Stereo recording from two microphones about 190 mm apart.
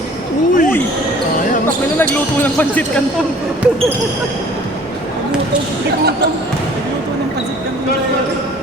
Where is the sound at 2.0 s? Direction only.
10° left (ahead or behind).